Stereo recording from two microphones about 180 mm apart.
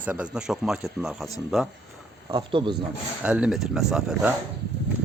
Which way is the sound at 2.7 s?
5° right (ahead or behind).